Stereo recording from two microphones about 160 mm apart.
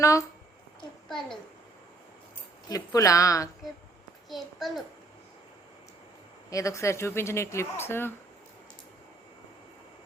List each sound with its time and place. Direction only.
0.0 s speech: 20° left (ahead or behind)
1.0 s a child's voice: 5° left (ahead or behind)
2.6 s speech: 20° left (ahead or behind)
4.3 s a child's voice: centre (ahead or behind)
6.5 s speech: 20° left (ahead or behind)